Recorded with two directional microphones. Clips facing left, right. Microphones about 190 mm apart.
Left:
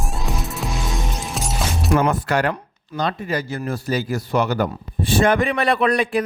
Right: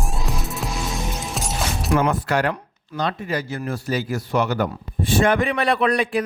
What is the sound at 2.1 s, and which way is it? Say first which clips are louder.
A man's voice: left 1 dB; 45° left (ahead or behind).